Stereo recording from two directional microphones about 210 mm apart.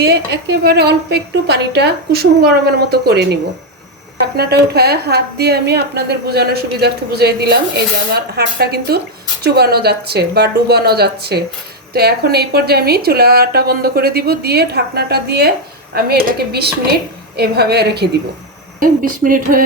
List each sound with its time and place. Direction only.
0.0 s speech: 55° right (ahead or behind)
4.4 s speech: 50° right (ahead or behind)
18.8 s speech: 40° right (ahead or behind)